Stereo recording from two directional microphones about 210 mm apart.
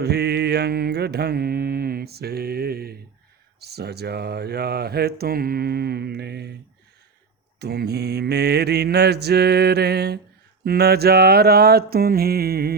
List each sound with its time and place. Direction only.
0.0 s mantra: 50° right (ahead or behind)
3.6 s speech: 50° right (ahead or behind)
7.6 s speech: 50° right (ahead or behind)